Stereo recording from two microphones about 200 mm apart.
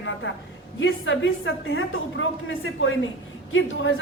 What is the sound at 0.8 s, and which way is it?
A woman's voice, 70° left (ahead or behind).